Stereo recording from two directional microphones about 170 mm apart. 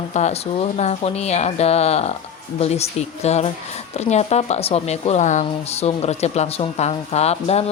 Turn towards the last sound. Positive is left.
turn(degrees=40)  # may be behind; listen again after turning